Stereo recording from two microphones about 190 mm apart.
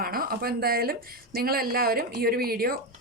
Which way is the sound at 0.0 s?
50° right (ahead or behind).